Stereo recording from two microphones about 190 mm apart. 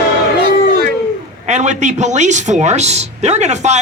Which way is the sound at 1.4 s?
40° right (ahead or behind).